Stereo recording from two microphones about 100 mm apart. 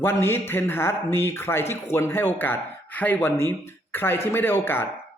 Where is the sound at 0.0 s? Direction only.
25° left (ahead or behind).